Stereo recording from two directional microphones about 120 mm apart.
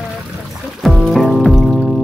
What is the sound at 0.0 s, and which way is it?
Music, centre (ahead or behind).